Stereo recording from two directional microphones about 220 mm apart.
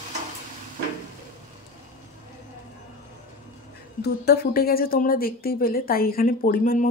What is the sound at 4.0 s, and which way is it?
A woman's voice, 45° left (ahead or behind).